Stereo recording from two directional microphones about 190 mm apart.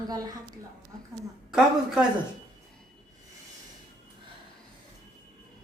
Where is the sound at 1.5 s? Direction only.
5° right (ahead or behind).